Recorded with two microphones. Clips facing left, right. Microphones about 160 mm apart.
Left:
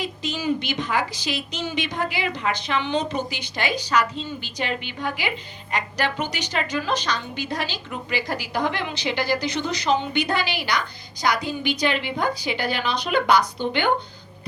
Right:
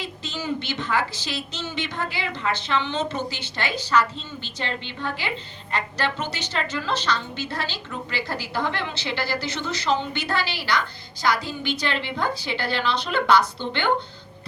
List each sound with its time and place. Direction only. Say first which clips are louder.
0.0 s a woman's voice: left 5 dB; 15° left (ahead or behind)